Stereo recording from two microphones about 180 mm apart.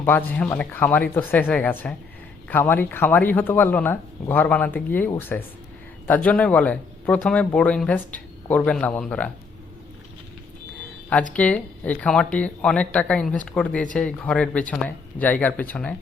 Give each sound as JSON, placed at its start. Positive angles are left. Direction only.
{"t": 0.0, "sound": "a man's voice", "side_deg": 10}
{"t": 11.3, "sound": "a man's voice", "side_deg": 10}